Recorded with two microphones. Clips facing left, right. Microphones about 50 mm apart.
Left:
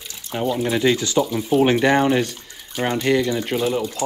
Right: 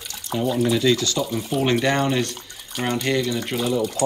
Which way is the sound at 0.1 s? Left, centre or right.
Left.